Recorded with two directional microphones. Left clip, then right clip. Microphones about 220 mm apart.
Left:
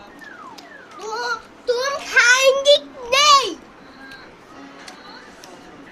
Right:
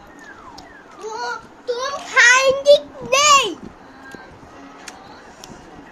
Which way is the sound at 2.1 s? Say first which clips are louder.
Right 1 dB; 40° left (ahead or behind).